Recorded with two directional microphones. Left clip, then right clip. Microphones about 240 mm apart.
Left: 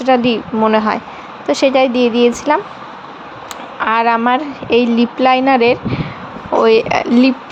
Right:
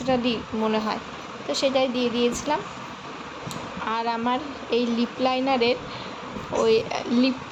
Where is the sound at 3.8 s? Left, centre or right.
Left.